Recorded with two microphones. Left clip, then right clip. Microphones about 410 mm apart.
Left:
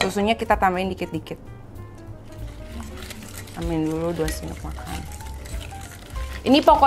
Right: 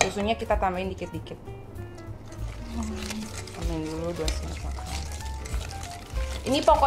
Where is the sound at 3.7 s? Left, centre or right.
Left.